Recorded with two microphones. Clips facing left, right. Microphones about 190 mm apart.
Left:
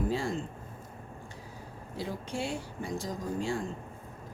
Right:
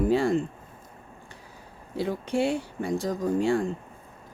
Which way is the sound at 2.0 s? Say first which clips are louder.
Right 9 dB; 65° right (ahead or behind).